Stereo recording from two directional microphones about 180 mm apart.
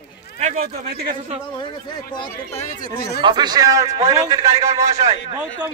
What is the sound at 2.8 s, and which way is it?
Speech, 60° left (ahead or behind).